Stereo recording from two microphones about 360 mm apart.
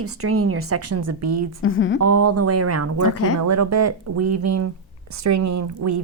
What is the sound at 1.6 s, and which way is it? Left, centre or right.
Speech, left.